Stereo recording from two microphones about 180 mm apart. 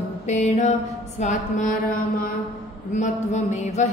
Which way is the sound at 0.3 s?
40° left (ahead or behind).